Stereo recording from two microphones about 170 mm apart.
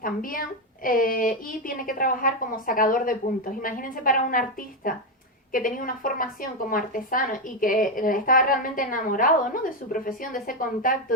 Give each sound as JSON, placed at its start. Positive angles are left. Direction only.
{"t": 0.0, "sound": "a woman's voice", "side_deg": 55}